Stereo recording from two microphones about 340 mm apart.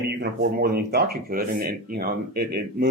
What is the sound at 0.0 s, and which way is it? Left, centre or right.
Speech, right.